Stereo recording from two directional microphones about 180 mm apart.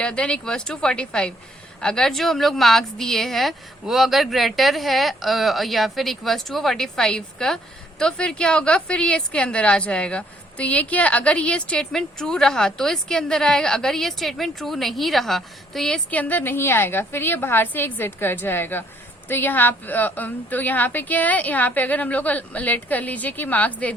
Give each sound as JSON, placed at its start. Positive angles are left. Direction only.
{"t": 0.0, "sound": "a woman's voice", "side_deg": 5}